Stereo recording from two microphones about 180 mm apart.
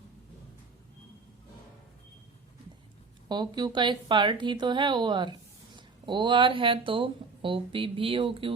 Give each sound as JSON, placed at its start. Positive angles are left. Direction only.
{"t": 3.2, "sound": "a woman's voice", "side_deg": -25}